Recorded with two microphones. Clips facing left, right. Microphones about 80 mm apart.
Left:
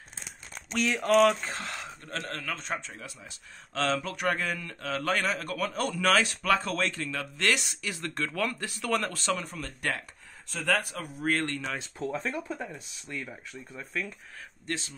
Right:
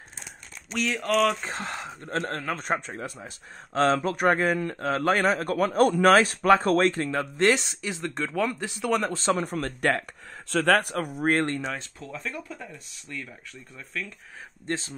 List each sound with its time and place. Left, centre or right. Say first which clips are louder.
0.7 s speech: left 1 dB; centre
1.4 s a man's voice: right 3 dB; right
9.2 s a man's voice: right 6 dB; right
9.5 s speech: right 8 dB; right
10.5 s speech: right 7 dB; right
10.8 s speech: right 7 dB; right
11.2 s a man's voice: right 4 dB; right
12.0 s speech: left 4 dB; left; by 14.1 s centre
14.7 s a man's voice: right 4 dB; right